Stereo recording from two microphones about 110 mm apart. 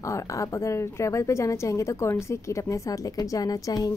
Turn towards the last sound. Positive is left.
turn(degrees=35)  # may be behind; listen again after turning